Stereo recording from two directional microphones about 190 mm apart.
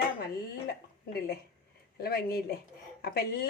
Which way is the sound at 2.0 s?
55° left (ahead or behind).